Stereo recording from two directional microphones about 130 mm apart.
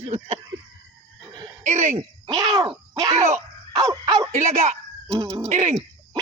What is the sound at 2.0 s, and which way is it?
Speech, 40° right (ahead or behind).